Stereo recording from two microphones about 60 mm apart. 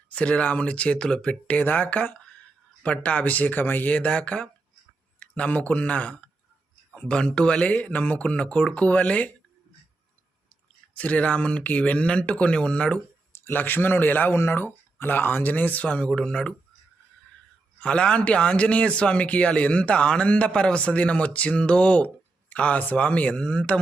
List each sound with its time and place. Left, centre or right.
0.1 s a man's voice: centre
3.9 s a man's voice: centre
10.9 s a man's voice: left
13.4 s a man's voice: left; by 16.6 s centre
17.7 s a man's voice: centre